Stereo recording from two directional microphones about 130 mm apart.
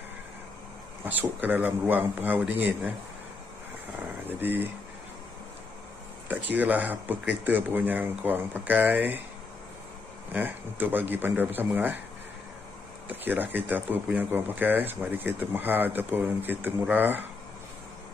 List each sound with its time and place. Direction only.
1.0 s speech: 15° right (ahead or behind)
4.3 s speech: 15° right (ahead or behind)
6.2 s speech: 15° right (ahead or behind)
10.3 s speech: 15° right (ahead or behind)
13.2 s speech: 15° right (ahead or behind)